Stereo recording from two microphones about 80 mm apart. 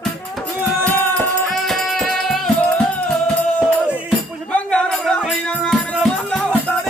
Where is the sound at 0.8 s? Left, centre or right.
Centre.